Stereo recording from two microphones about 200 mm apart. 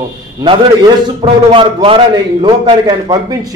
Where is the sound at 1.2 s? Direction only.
25° right (ahead or behind).